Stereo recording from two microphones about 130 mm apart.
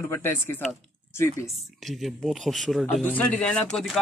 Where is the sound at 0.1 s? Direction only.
15° left (ahead or behind).